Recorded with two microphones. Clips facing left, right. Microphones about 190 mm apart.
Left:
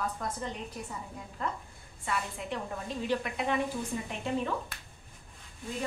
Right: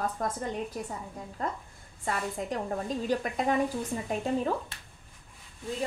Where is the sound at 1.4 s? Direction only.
40° right (ahead or behind).